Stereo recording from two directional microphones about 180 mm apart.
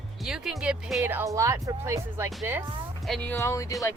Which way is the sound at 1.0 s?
15° right (ahead or behind).